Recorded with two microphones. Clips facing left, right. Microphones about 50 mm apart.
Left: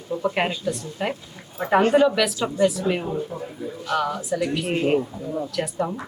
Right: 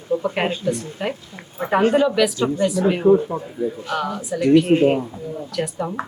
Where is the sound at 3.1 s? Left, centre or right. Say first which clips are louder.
Right 13 dB; right.